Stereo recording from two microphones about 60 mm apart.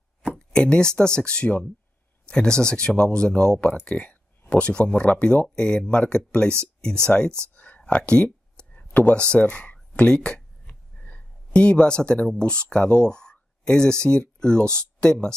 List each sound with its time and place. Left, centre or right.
0.2 s speech: centre
7.5 s a sound: left
9.3 s speech: left